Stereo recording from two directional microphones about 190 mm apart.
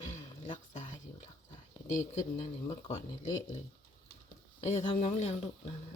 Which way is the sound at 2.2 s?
35° left (ahead or behind).